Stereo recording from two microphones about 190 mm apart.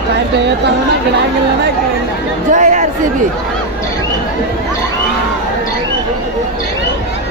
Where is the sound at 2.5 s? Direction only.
40° right (ahead or behind).